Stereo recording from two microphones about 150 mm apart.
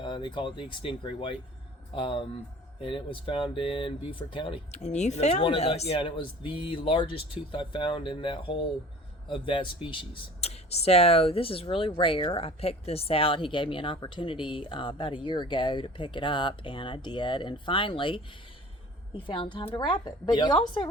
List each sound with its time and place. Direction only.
0.0 s speech: 30° left (ahead or behind)
4.9 s speech: 50° left (ahead or behind); by 20.8 s 30° left (ahead or behind)